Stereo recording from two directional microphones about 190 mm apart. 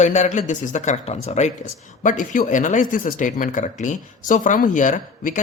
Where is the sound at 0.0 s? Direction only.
40° left (ahead or behind).